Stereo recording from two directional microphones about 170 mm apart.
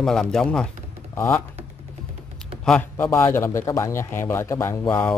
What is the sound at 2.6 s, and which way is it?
A man's voice, 5° left (ahead or behind).